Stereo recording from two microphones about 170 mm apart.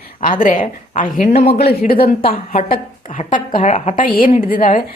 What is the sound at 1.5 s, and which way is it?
Speech, 65° left (ahead or behind).